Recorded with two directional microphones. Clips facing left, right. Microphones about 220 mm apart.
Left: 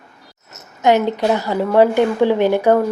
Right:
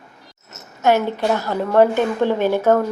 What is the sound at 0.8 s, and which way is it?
A woman's voice, 15° left (ahead or behind).